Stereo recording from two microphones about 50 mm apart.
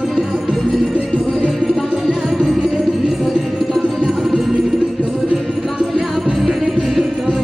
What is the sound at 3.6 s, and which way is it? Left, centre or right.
Music, centre.